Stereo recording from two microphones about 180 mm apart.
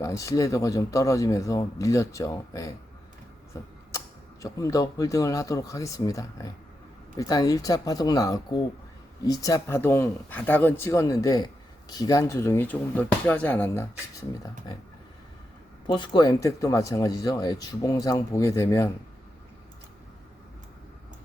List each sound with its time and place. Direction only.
0.0 s speech: 15° left (ahead or behind)
4.4 s speech: 20° left (ahead or behind)
15.9 s speech: 25° left (ahead or behind)